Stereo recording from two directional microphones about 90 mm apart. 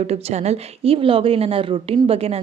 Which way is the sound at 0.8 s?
90° right.